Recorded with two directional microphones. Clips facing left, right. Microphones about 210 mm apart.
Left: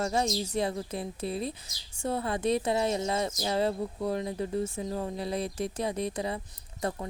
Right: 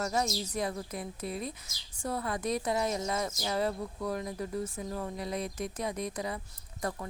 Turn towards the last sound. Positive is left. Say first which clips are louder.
# left 3 dB
turn(degrees=25)  # may be behind; listen again after turning